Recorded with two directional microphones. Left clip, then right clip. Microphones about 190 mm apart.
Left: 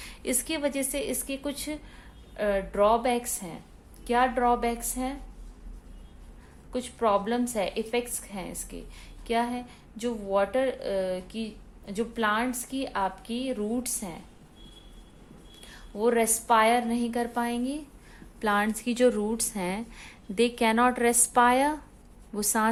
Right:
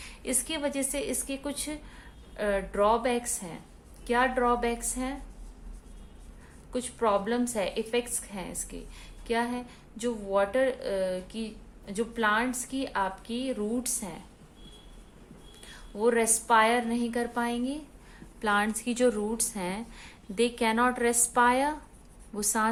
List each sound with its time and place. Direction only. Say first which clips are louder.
0.0 s speech: left 2 dB; 35° left (ahead or behind); by 5.1 s 15° left (ahead or behind)
6.7 s speech: left 1 dB; 15° left (ahead or behind)
15.6 s speech: even; 15° left (ahead or behind)